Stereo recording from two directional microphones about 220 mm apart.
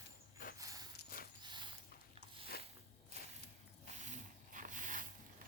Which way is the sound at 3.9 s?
35° right (ahead or behind).